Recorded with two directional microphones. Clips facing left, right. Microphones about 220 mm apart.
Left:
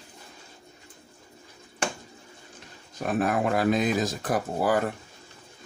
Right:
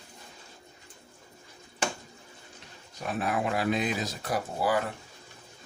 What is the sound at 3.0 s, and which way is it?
Speech, 50° left (ahead or behind).